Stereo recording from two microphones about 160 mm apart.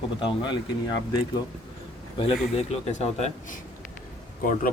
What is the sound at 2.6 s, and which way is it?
Speech, 40° left (ahead or behind).